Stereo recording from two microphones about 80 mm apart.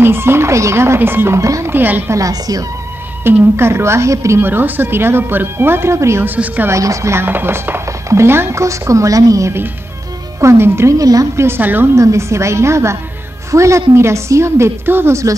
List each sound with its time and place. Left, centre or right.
0.0 s speech: right
1.7 s a woman's voice: right
2.1 s a woman's voice: right
3.3 s a woman's voice: right
6.2 s a woman's voice: right
6.7 s speech: right
11.0 s a woman's voice: right
11.4 s a woman's voice: right
11.9 s speech: right